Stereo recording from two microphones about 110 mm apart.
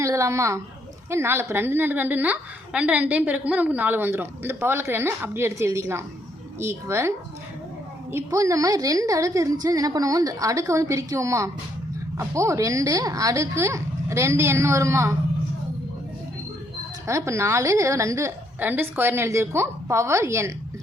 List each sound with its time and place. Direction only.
0.0 s a woman's voice: 25° right (ahead or behind)
8.1 s a woman's voice: 30° right (ahead or behind)
17.1 s a woman's voice: 25° right (ahead or behind)